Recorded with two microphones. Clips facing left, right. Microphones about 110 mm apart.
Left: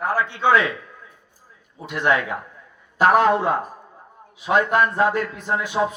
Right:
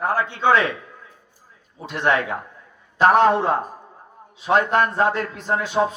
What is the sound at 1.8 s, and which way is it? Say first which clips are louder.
Speech: even; 40° right (ahead or behind).